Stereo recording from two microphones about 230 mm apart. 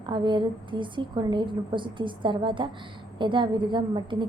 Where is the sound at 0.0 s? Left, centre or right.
Centre.